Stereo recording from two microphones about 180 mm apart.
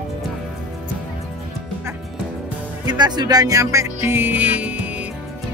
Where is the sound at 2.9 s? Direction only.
25° right (ahead or behind); by 5.0 s 10° right (ahead or behind).